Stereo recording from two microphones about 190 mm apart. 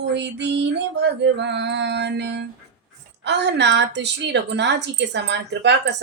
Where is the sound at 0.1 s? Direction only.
65° right (ahead or behind).